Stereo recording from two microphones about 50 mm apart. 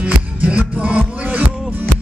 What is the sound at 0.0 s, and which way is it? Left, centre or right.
Music, right.